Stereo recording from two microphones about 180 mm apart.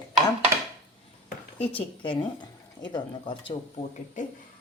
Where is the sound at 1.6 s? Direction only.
30° left (ahead or behind).